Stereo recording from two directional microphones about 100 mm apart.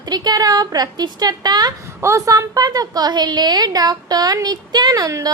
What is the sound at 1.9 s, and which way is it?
A woman's voice, 30° right (ahead or behind).